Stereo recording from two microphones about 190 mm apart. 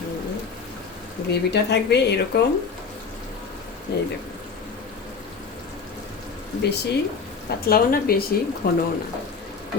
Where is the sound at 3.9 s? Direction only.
65° left (ahead or behind).